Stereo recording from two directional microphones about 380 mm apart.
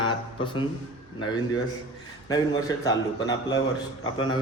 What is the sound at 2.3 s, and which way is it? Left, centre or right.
A man's voice, centre.